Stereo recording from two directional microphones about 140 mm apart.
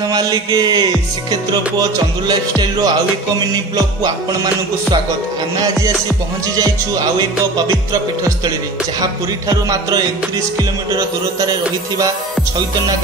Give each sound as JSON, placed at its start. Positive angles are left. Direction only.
{"t": 0.1, "sound": "music", "side_deg": -25}
{"t": 6.4, "sound": "music", "side_deg": -25}
{"t": 9.7, "sound": "music", "side_deg": -25}